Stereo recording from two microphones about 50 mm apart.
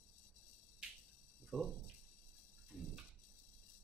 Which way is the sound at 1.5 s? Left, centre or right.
Centre.